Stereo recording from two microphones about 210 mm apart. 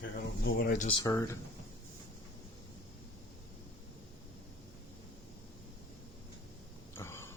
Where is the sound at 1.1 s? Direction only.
15° left (ahead or behind).